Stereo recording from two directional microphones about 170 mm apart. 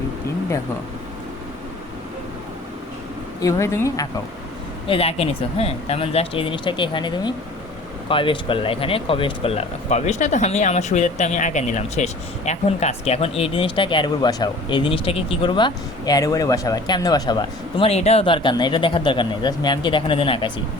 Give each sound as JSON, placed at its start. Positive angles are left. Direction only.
{"t": 3.4, "sound": "speech", "side_deg": 15}
{"t": 4.9, "sound": "speech", "side_deg": 35}